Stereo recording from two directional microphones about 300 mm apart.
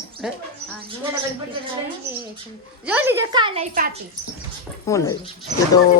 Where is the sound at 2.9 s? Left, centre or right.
Centre; by 3.9 s right.